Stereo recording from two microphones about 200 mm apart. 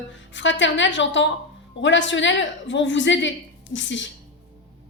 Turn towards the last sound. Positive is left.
turn(degrees=65)  # may be behind; listen again after turning